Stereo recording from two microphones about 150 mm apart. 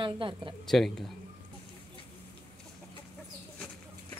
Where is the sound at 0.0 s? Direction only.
35° right (ahead or behind).